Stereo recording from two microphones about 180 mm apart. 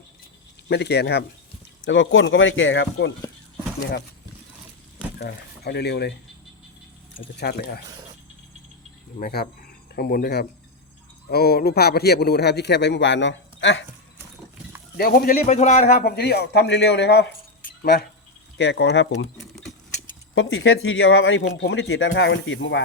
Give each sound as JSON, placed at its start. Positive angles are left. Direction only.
{"t": 0.7, "sound": "speech", "side_deg": 70}
{"t": 1.8, "sound": "speech", "side_deg": 90}
{"t": 5.1, "sound": "speech", "side_deg": 65}
{"t": 7.3, "sound": "speech", "side_deg": 60}
{"t": 9.2, "sound": "speech", "side_deg": 55}
{"t": 14.9, "sound": "speech", "side_deg": 55}
{"t": 15.5, "sound": "speech", "side_deg": 40}
{"t": 18.5, "sound": "speech", "side_deg": 75}
{"t": 20.3, "sound": "speech", "side_deg": 90}